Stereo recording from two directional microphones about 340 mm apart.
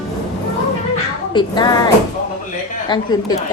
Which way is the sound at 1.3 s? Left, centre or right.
Centre.